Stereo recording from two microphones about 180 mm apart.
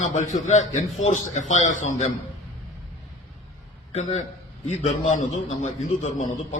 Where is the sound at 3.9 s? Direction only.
35° left (ahead or behind).